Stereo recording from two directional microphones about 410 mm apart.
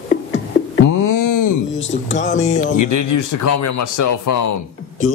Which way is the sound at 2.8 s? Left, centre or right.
Left.